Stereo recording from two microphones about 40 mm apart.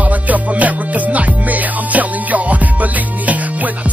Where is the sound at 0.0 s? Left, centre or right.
Right.